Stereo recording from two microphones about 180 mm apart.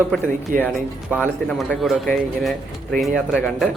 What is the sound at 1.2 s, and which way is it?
Speech, centre (ahead or behind).